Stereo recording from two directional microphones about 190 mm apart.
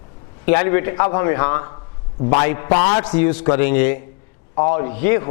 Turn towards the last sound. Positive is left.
turn(degrees=15)  # may be behind; listen again after turning